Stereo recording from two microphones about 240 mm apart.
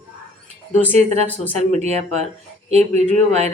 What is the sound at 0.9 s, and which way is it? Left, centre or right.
A woman's voice, right.